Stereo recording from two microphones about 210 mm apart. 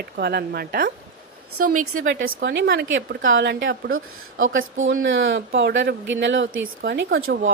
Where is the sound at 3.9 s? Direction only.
75° right (ahead or behind).